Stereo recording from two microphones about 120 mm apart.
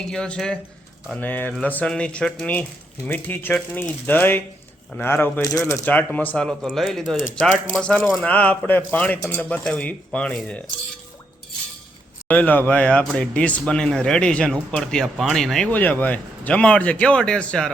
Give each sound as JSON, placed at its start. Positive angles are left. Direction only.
{"t": 0.0, "sound": "speech", "side_deg": 5}
{"t": 5.8, "sound": "speech", "side_deg": 15}
{"t": 7.8, "sound": "speech", "side_deg": 10}
{"t": 12.3, "sound": "speech", "side_deg": 15}